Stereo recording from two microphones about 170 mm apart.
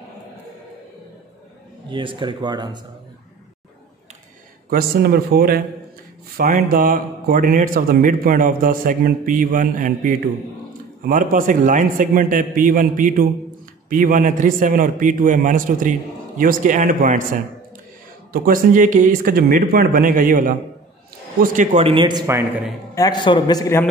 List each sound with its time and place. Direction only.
1.9 s speech: 30° right (ahead or behind)
4.6 s a man's voice: 65° right (ahead or behind)
18.3 s a man's voice: 55° right (ahead or behind)
21.8 s speech: 30° right (ahead or behind)
22.9 s a man's voice: 25° left (ahead or behind)